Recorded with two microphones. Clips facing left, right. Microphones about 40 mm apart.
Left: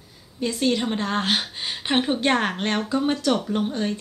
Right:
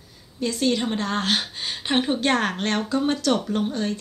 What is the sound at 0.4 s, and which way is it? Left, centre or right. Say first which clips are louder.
A woman's voice: even; centre.